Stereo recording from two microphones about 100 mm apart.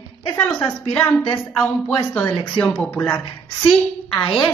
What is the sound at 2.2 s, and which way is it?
Speech, 10° left (ahead or behind).